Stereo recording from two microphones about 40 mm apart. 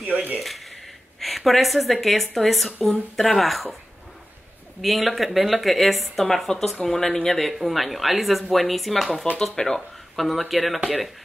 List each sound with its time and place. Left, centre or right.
0.0 s speech: right
0.4 s speech: centre
4.8 s speech: centre
9.8 s speech: centre